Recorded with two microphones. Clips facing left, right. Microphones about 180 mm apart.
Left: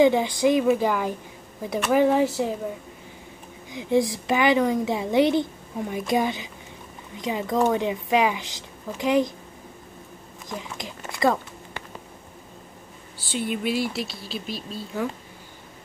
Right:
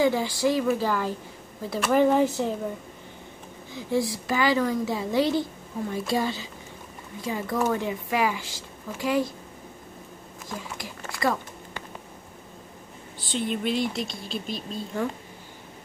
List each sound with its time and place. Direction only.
0.0 s a woman's voice: 20° left (ahead or behind)
1.8 s speech: centre (ahead or behind)
3.7 s a woman's voice: 20° left (ahead or behind)
10.5 s a sound: 20° left (ahead or behind)
13.3 s speech: 5° left (ahead or behind)